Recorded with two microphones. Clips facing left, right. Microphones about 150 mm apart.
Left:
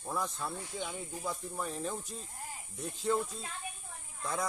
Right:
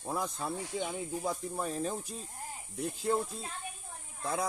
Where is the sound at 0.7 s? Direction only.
35° right (ahead or behind).